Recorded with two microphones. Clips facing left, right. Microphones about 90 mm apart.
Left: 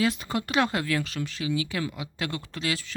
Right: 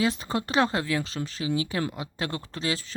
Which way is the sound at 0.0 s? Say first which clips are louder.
Even; 30° right (ahead or behind).